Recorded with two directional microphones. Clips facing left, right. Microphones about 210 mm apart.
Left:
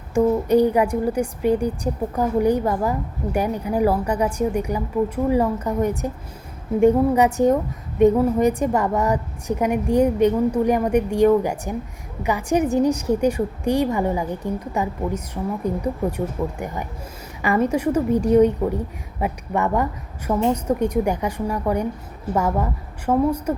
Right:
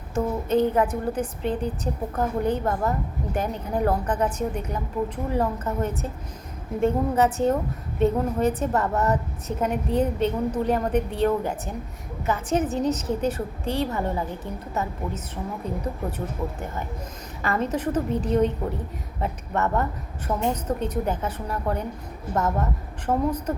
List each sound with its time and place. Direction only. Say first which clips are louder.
0.1 s a woman's voice: left 6 dB; 15° left (ahead or behind)